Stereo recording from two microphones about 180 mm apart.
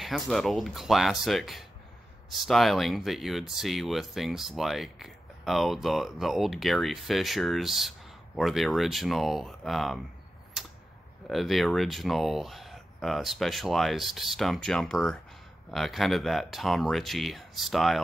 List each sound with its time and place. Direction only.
0.0 s speech: centre (ahead or behind)
10.6 s a sound: centre (ahead or behind)
11.2 s speech: centre (ahead or behind)